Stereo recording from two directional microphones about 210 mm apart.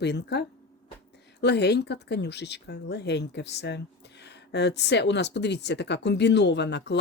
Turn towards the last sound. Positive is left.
turn(degrees=55)  # may be behind; listen again after turning